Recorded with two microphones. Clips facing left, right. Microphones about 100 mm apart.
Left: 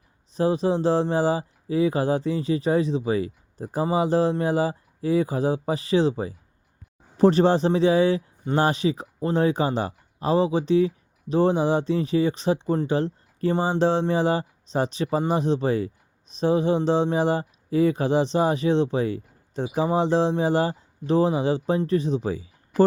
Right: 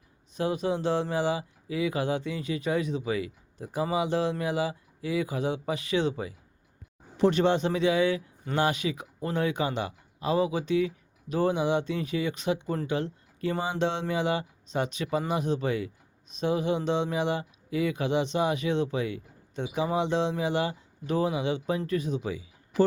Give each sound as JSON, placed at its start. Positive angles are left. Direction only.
{"t": 0.3, "sound": "speech", "side_deg": 35}